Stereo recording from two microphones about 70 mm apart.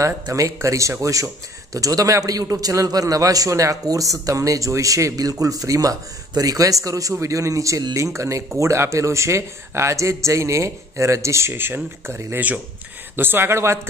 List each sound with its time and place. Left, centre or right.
0.0 s speech: right